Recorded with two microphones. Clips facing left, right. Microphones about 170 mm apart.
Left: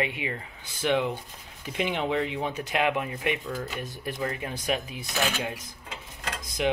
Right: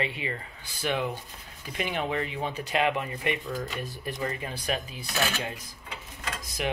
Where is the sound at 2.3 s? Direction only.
15° left (ahead or behind).